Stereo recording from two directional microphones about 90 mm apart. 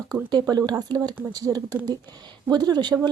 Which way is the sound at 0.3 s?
50° right (ahead or behind).